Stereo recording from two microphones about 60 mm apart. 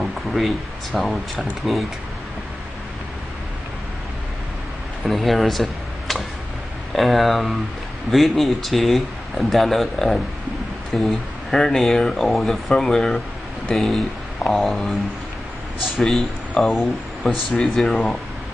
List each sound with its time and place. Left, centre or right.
0.0 s a sound: centre
0.9 s speech: centre
5.0 s speech: centre
17.8 s speech: centre